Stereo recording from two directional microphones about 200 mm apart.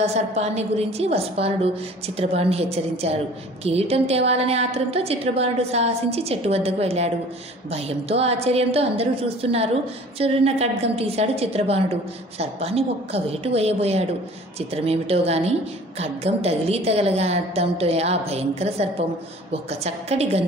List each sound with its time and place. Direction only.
0.0 s a woman's voice: 35° right (ahead or behind)